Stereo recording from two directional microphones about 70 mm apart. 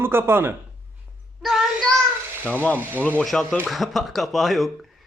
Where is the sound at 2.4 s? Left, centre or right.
Right.